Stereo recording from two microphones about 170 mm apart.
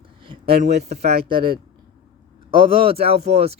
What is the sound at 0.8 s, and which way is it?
Speech, 40° right (ahead or behind).